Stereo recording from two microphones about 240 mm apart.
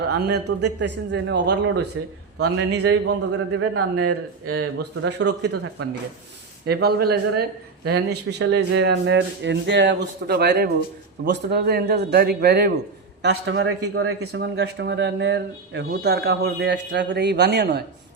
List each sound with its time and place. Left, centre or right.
0.1 s a man's voice: right
4.8 s speech: right
5.2 s speech: right
6.7 s a man's voice: right
13.2 s a man's voice: right
14.2 s speech: right